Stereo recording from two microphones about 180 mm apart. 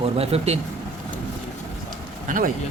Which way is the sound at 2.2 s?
50° right (ahead or behind).